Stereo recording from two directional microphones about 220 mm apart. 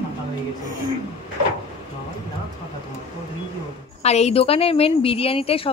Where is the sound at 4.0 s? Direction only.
30° left (ahead or behind).